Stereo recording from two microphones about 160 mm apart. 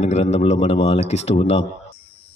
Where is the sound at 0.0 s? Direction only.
45° left (ahead or behind).